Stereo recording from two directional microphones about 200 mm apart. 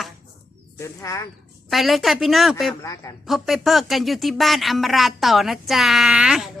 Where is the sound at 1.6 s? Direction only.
Centre (ahead or behind).